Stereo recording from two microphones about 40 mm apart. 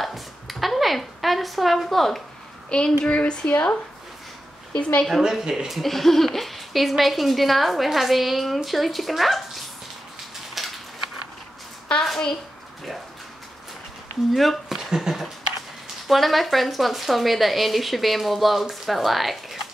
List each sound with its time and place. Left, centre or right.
0.0 s a sound: centre
2.7 s speech: left
4.7 s speech: left
5.3 s speech: centre
5.8 s speech: centre
10.6 s a sound: centre
11.9 s a woman's voice: left
14.3 s a sound: centre
15.0 s speech: centre